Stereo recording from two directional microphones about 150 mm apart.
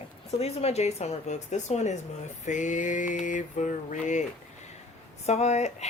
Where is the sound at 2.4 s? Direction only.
55° left (ahead or behind).